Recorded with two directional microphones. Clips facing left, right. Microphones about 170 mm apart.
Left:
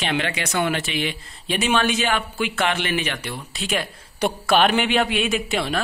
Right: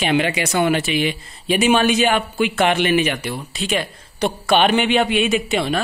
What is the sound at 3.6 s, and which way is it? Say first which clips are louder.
A man's voice: right 3 dB; centre (ahead or behind).